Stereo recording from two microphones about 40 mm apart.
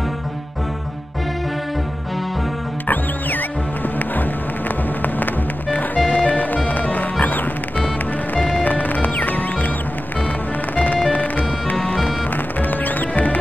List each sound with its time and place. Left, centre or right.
5.2 s music: left
8.4 s music: left
10.8 s music: left
12.8 s music: left